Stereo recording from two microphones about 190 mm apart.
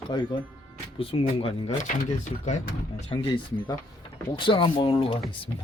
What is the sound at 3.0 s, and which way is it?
Speech, 25° left (ahead or behind).